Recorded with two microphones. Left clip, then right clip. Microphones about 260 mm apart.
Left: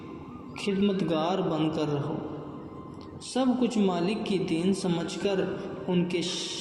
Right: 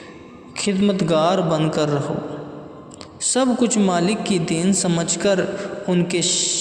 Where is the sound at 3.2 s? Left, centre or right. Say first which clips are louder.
Right 8 dB; right.